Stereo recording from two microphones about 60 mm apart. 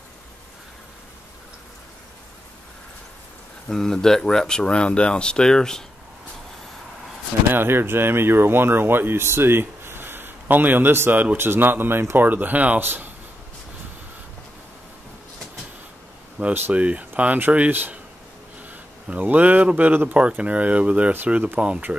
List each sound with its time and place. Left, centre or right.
3.6 s speech: centre
7.5 s speech: right
11.3 s speech: right
12.3 s speech: right
16.4 s speech: right